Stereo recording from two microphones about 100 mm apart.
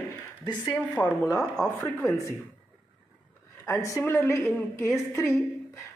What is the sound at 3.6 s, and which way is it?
Speech, 30° left (ahead or behind).